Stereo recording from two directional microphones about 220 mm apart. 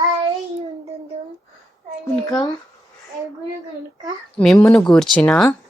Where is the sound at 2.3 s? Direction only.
15° left (ahead or behind).